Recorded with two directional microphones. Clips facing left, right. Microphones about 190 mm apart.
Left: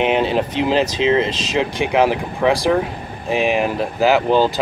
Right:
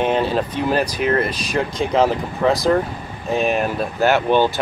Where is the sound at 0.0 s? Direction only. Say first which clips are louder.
Left 2 dB; 20° left (ahead or behind).